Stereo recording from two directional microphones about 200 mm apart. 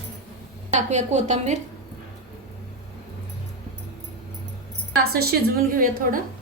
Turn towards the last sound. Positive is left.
turn(degrees=-45)  # may be behind; listen again after turning